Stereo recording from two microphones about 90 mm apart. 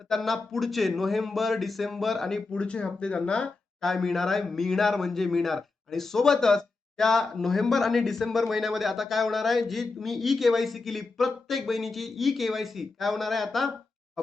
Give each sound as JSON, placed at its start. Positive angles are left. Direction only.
{"t": 0.1, "sound": "speech", "side_deg": 0}